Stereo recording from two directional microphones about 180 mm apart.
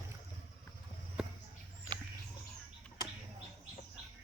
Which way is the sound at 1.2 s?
5° right (ahead or behind).